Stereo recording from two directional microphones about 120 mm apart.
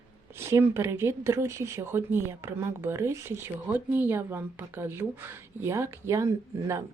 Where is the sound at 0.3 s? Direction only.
20° right (ahead or behind).